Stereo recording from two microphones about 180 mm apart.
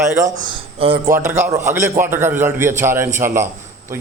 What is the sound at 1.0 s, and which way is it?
A man's voice, 15° right (ahead or behind).